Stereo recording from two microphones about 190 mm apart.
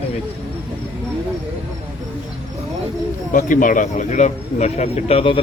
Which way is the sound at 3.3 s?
45° left (ahead or behind).